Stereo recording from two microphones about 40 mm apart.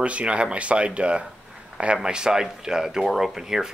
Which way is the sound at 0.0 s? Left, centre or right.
Right.